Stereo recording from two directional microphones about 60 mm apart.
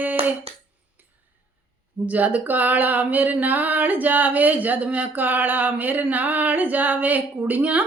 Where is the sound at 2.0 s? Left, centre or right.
Right.